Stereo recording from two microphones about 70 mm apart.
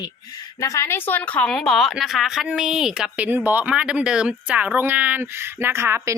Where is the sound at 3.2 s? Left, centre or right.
Right.